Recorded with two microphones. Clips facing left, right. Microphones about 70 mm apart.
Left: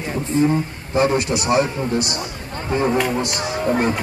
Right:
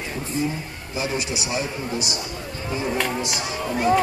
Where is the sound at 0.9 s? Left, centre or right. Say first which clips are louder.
Left 9 dB; left.